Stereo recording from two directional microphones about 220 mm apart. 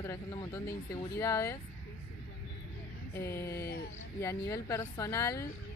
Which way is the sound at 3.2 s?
10° left (ahead or behind).